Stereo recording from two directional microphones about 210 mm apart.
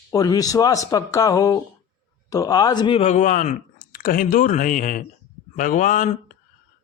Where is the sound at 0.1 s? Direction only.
15° left (ahead or behind).